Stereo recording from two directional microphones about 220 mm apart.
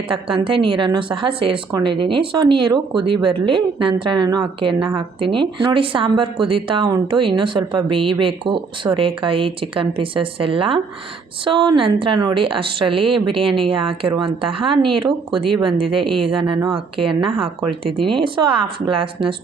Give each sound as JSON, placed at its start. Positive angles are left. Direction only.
{"t": 0.1, "sound": "a woman's voice", "side_deg": -25}
{"t": 16.0, "sound": "speech", "side_deg": 0}
{"t": 16.3, "sound": "a woman's voice", "side_deg": -20}